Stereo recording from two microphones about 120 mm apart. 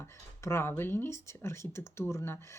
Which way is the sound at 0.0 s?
20° left (ahead or behind).